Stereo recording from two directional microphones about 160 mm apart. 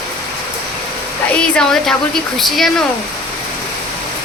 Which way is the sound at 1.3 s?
5° left (ahead or behind).